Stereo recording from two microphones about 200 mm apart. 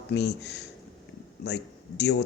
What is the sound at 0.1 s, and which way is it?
Speech, 60° left (ahead or behind).